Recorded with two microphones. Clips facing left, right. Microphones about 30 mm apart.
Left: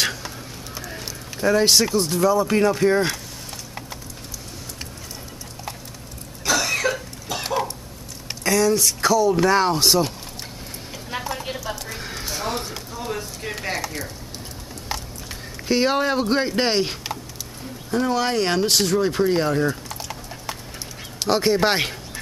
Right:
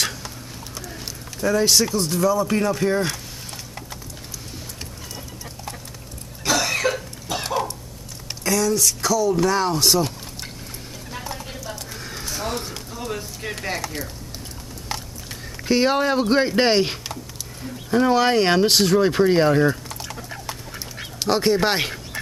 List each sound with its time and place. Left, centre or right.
0.0 s a sound: centre
0.7 s speech: centre
6.4 s cough: centre
8.5 s speech: centre
9.8 s speech: centre
11.9 s a sound: centre
12.6 s speech: centre
14.9 s a sound: centre
15.7 s speech: centre
19.7 s typing: centre
21.2 s speech: centre